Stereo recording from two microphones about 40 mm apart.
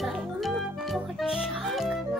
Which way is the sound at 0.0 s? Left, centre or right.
Centre.